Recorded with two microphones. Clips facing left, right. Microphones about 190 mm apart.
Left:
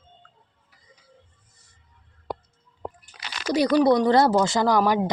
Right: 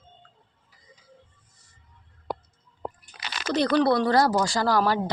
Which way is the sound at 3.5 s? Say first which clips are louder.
Left 3 dB; 10° left (ahead or behind).